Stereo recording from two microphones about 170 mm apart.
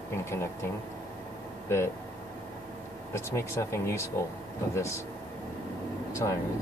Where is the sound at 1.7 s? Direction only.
15° left (ahead or behind).